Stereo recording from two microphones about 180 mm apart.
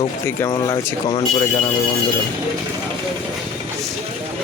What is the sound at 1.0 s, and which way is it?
Speech, 25° left (ahead or behind).